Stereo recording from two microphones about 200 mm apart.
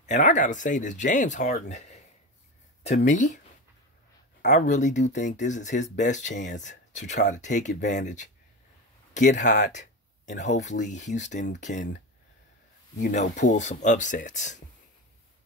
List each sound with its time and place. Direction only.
0.0 s speech: 35° left (ahead or behind)
3.1 s speech: 35° left (ahead or behind)
4.5 s speech: 35° left (ahead or behind)